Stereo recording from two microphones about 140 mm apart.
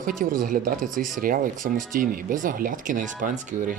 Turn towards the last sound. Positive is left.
turn(degrees=-70)  # may be behind; listen again after turning